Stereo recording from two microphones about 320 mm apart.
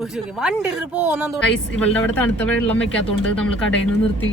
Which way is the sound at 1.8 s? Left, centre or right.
Centre.